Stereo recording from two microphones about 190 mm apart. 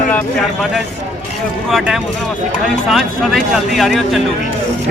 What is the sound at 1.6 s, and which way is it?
A man's voice, centre (ahead or behind).